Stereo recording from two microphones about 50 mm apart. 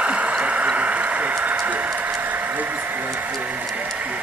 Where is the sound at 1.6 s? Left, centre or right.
Right.